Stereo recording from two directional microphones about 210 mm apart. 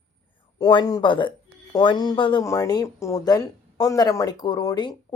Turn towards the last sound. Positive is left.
turn(degrees=20)  # may be behind; listen again after turning